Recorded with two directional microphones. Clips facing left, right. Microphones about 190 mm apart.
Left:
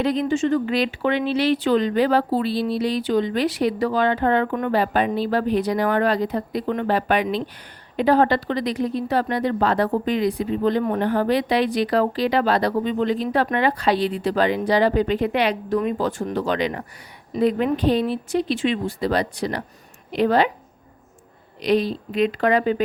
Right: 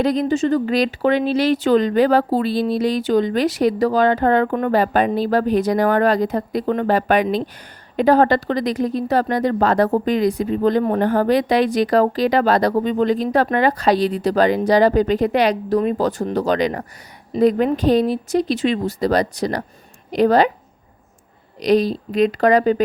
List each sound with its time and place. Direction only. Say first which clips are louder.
0.0 s a woman's voice: right 3 dB; 40° right (ahead or behind)
21.6 s speech: right 4 dB; 40° right (ahead or behind)